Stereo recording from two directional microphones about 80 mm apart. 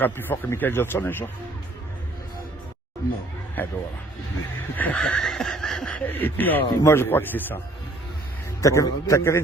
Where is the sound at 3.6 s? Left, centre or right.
Left.